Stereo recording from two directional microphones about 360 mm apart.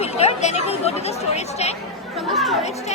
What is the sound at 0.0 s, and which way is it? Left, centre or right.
Speech, centre.